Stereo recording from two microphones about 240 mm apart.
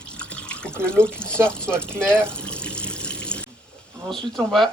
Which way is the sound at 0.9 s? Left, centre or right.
Centre.